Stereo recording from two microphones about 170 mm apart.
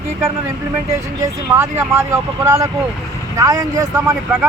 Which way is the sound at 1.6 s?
15° right (ahead or behind).